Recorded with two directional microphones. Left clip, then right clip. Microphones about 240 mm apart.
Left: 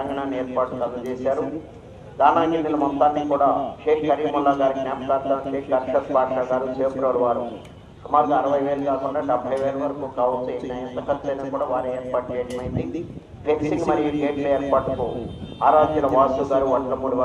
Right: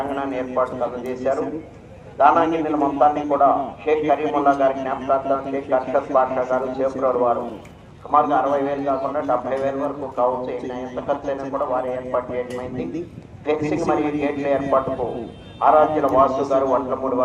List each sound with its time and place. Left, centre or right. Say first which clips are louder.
0.1 s a man's voice: right 1 dB; right
13.7 s a man's voice: right 1 dB; right